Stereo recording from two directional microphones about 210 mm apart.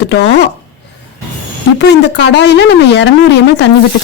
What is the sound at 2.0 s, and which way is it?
Speech, 55° left (ahead or behind).